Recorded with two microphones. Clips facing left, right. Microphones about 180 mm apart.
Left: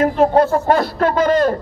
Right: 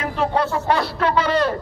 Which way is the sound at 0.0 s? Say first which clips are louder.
Left 8 dB; 45° left (ahead or behind).